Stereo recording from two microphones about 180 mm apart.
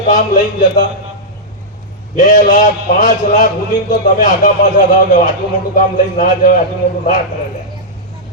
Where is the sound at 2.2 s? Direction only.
45° left (ahead or behind).